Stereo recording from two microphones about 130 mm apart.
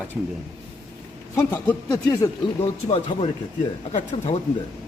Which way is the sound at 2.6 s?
50° left (ahead or behind).